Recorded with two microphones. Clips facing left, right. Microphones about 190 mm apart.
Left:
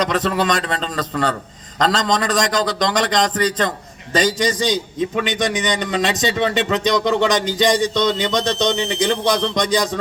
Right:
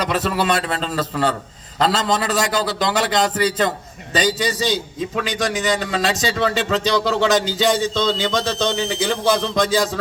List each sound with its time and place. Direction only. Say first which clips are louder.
0.0 s a man's voice: left 2 dB; 5° right (ahead or behind)
7.8 s speech: left 2 dB; 15° left (ahead or behind)
9.0 s a man's voice: even; 5° right (ahead or behind)